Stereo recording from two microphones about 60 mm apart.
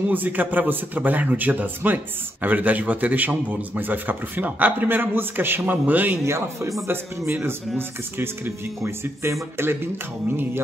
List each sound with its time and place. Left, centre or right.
0.1 s a man's voice: right
6.2 s speech: right